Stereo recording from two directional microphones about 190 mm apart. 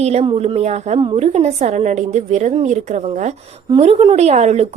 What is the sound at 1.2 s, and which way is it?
Speech, 35° right (ahead or behind).